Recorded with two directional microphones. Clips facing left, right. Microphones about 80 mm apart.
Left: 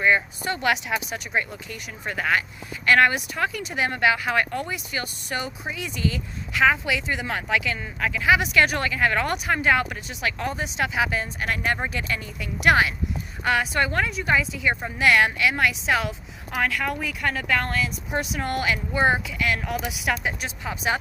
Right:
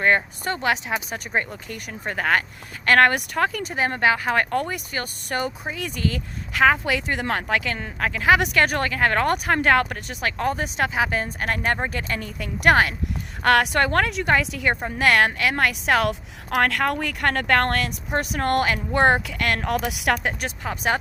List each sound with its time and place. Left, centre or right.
0.0 s speech: right
0.5 s speech: right
13.4 s a woman's voice: right
14.3 s speech: right
14.8 s a woman's voice: right